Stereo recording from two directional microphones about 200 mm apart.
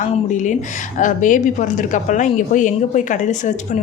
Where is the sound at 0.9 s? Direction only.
40° left (ahead or behind).